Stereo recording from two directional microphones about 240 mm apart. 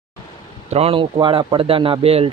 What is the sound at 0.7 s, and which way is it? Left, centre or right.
Speech, right.